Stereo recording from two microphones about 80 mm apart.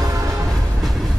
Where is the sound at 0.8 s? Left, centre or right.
Centre.